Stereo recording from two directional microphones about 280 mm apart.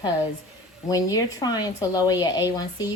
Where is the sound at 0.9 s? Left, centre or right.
Centre.